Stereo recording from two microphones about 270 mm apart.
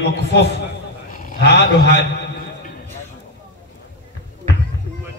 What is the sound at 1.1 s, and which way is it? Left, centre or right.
Speech, left.